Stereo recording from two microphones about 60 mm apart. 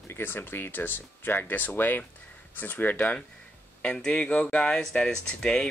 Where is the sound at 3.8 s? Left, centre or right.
Centre.